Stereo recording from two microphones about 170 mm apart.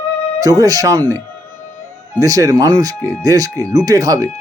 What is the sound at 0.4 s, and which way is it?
Speech, 20° right (ahead or behind).